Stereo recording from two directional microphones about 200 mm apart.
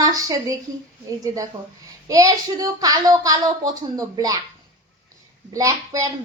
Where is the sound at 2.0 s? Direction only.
15° right (ahead or behind).